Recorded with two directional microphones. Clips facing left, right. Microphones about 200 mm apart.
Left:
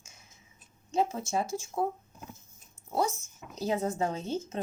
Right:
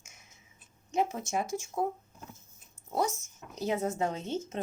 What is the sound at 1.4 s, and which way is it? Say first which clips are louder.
Speech: even; 20° right (ahead or behind).